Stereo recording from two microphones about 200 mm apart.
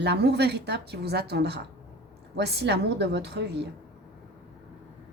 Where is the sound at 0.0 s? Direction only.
55° right (ahead or behind).